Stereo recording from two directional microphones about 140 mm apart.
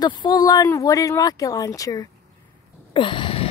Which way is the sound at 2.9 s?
35° left (ahead or behind).